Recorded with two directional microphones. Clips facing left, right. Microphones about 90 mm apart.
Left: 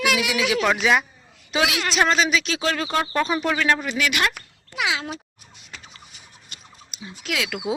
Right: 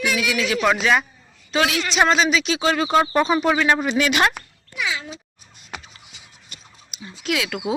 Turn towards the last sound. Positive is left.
turn(degrees=0)  # may be behind; listen again after turning